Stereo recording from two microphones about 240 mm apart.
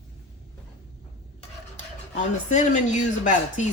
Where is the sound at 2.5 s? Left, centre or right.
Left.